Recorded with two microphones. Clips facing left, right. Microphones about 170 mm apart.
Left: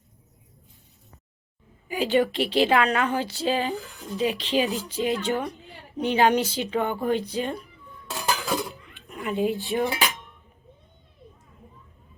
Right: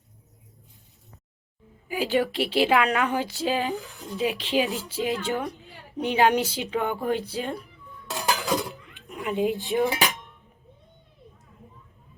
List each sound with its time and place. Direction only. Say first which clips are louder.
1.9 s music: left 2 dB; centre (ahead or behind)
2.5 s speech: right 1 dB; 5° right (ahead or behind)
3.4 s music: left 2 dB; centre (ahead or behind)
6.0 s speech: left 1 dB; 15° right (ahead or behind)
7.3 s music: left 2 dB; centre (ahead or behind)
8.1 s dishes: right 1 dB; 20° right (ahead or behind)
9.2 s speech: even; 15° right (ahead or behind)